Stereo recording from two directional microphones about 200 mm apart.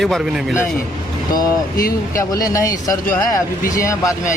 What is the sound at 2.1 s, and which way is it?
Speech, 15° left (ahead or behind).